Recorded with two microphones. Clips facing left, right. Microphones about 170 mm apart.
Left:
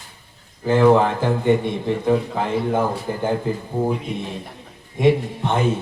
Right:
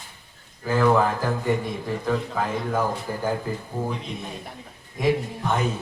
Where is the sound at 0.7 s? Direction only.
25° left (ahead or behind).